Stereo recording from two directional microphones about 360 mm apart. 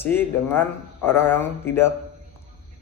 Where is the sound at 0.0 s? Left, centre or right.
Centre.